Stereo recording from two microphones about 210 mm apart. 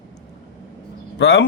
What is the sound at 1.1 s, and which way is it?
Speech, 55° left (ahead or behind).